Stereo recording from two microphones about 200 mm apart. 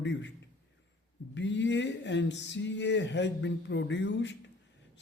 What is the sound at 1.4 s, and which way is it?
Speech, 65° left (ahead or behind).